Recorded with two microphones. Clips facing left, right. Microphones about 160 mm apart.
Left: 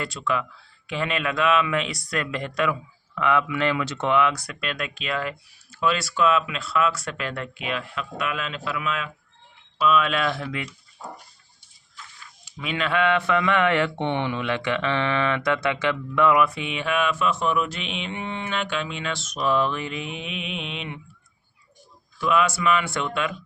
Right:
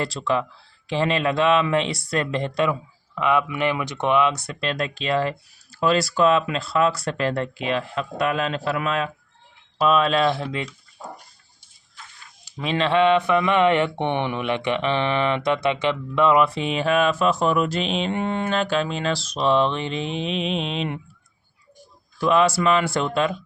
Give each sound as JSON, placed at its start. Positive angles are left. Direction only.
{"t": 0.0, "sound": "speech", "side_deg": -35}
{"t": 12.5, "sound": "speech", "side_deg": -35}
{"t": 22.2, "sound": "speech", "side_deg": -35}